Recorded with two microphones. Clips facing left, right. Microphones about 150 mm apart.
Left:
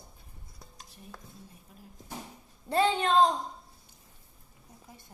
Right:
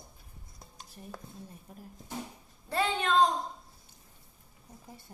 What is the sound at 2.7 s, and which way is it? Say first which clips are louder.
Speech: left 4 dB; 30° left (ahead or behind).